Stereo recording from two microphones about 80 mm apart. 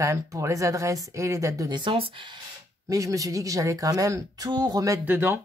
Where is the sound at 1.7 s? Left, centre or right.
Right.